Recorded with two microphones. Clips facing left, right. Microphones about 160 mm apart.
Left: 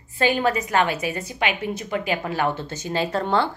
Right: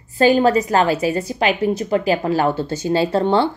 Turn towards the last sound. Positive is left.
turn(degrees=-30)  # may be behind; listen again after turning